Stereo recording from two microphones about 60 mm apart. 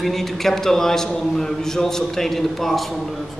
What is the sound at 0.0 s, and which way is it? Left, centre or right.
A man's voice, centre.